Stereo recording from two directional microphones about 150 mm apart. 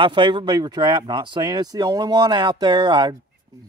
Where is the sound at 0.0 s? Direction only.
35° right (ahead or behind).